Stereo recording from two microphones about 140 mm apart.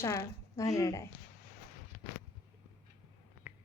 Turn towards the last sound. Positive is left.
turn(degrees=-15)  # may be behind; listen again after turning